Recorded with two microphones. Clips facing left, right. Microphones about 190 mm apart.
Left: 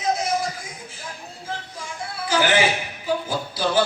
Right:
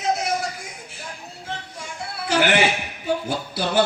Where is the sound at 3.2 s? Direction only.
65° right (ahead or behind).